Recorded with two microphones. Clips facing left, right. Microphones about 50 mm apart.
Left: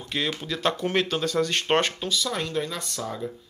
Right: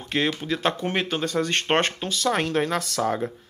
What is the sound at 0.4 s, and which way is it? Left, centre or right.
Speech, right.